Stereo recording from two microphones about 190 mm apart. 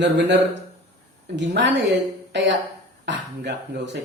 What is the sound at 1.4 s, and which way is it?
Speech, 65° right (ahead or behind).